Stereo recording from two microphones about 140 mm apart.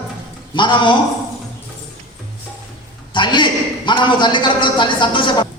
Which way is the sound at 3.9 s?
35° left (ahead or behind).